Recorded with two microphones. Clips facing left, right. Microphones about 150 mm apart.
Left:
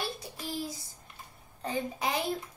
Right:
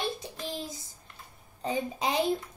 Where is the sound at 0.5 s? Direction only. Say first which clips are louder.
Left 2 dB; 20° right (ahead or behind).